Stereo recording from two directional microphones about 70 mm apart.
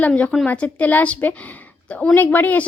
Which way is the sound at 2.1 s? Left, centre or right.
Left.